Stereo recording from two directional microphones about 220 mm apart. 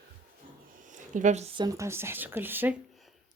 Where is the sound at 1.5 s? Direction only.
15° right (ahead or behind).